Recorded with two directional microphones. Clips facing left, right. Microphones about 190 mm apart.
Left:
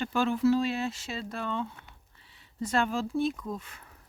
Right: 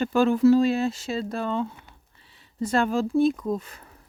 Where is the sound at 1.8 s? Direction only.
35° right (ahead or behind).